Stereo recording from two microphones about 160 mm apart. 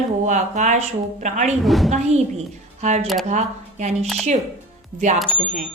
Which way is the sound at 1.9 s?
45° right (ahead or behind).